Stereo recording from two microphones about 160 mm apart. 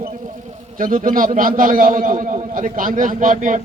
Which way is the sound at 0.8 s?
55° right (ahead or behind).